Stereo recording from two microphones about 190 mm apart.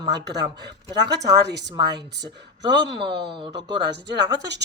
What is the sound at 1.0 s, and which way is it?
Speech, 60° right (ahead or behind).